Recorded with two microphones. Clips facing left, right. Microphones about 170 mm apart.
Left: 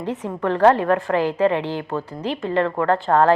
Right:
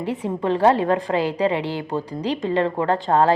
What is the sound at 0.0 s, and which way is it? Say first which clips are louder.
A woman's voice: right 1 dB; 10° right (ahead or behind).